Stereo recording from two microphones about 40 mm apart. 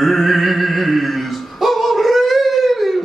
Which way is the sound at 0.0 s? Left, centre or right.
Centre.